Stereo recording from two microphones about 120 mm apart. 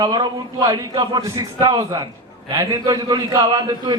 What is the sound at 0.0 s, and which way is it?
A man's voice, 35° right (ahead or behind).